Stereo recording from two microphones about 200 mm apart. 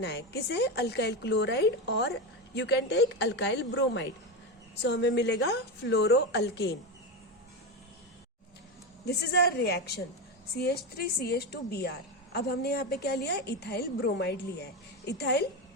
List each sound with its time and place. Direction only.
0.0 s a woman's voice: 55° left (ahead or behind)
9.0 s a woman's voice: 55° left (ahead or behind)